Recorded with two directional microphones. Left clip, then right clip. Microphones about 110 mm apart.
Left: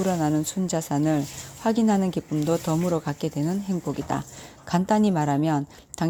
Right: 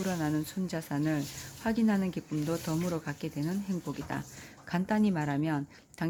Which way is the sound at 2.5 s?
20° left (ahead or behind).